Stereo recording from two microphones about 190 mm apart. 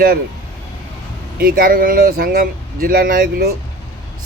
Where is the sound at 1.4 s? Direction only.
50° right (ahead or behind).